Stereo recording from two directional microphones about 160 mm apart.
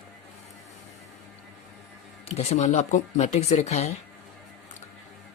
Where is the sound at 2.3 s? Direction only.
40° left (ahead or behind).